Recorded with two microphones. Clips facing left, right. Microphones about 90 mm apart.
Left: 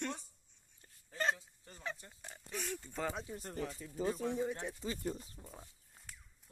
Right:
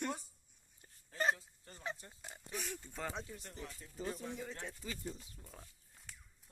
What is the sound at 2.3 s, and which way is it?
Oink, 20° right (ahead or behind).